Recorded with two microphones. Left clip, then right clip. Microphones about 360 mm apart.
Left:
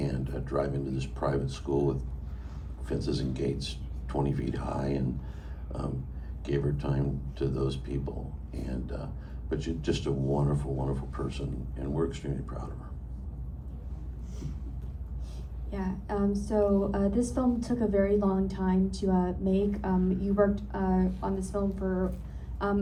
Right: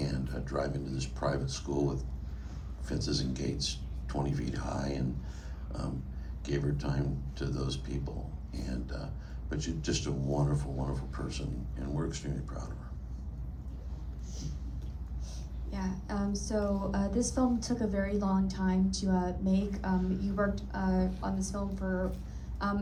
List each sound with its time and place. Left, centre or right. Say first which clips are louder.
0.0 s a woman's voice: left 3 dB; centre
9.5 s a woman's voice: left 4 dB; centre
15.7 s a woman's voice: left 5 dB; centre